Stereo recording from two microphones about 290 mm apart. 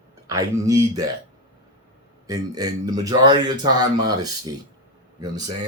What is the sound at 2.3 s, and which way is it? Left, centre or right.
Speech, centre.